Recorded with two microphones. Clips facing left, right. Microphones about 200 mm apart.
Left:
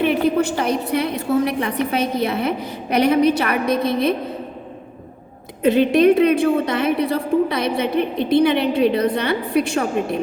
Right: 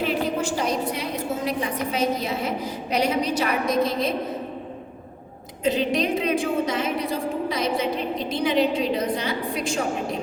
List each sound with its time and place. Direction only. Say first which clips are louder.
0.0 s a sound: left 7 dB; 60° left (ahead or behind)
1.3 s a woman's voice: left 8 dB; 65° left (ahead or behind)
5.6 s a woman's voice: left 9 dB; 60° left (ahead or behind)